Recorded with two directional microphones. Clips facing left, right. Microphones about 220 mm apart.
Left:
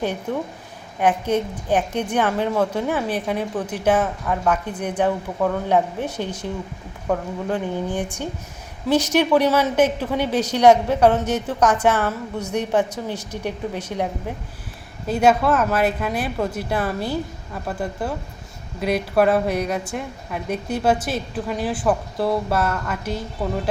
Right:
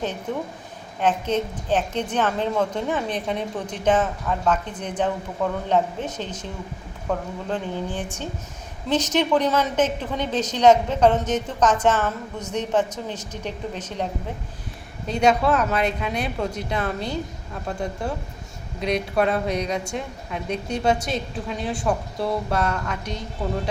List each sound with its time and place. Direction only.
0.9 s a woman's voice: 10° left (ahead or behind)